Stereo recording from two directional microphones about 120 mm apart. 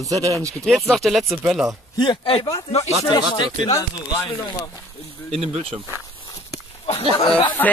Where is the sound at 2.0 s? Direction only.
40° left (ahead or behind).